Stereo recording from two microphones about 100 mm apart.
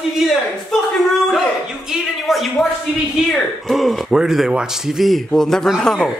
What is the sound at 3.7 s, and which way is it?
Speech, centre (ahead or behind).